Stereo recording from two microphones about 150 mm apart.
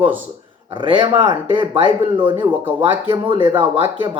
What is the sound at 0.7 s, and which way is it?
A man's voice, 35° right (ahead or behind).